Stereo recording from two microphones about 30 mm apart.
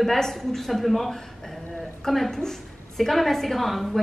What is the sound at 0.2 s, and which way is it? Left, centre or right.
A woman's voice, centre.